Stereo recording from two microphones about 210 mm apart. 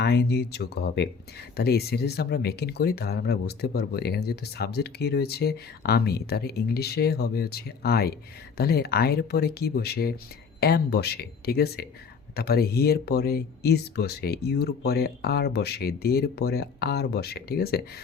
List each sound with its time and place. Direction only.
0.0 s speech: 50° left (ahead or behind)